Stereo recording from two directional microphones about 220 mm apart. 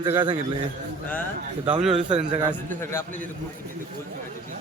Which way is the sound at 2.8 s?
10° left (ahead or behind).